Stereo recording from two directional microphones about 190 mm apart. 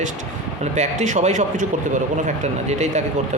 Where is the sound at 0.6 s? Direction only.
35° right (ahead or behind).